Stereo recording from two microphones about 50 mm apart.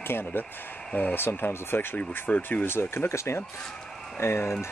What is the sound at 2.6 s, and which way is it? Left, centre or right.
Speech, left.